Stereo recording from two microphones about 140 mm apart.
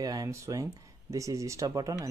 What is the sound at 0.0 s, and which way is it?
Speech, 25° right (ahead or behind).